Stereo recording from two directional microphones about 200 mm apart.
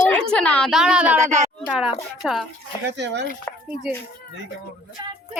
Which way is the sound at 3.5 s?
10° left (ahead or behind).